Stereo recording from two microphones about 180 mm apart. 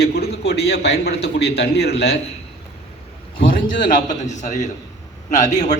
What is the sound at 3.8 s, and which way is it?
A man's voice, 45° left (ahead or behind).